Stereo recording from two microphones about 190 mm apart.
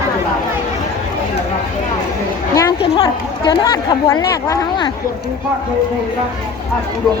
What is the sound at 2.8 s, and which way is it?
Speech, 25° left (ahead or behind).